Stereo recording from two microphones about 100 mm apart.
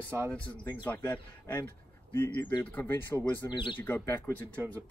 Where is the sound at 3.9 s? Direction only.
20° left (ahead or behind).